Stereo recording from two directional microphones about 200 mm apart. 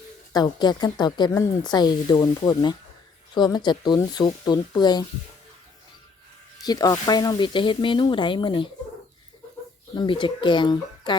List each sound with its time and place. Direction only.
0.3 s a woman's voice: 20° left (ahead or behind)
6.7 s a woman's voice: 20° left (ahead or behind)
9.9 s a woman's voice: 25° left (ahead or behind)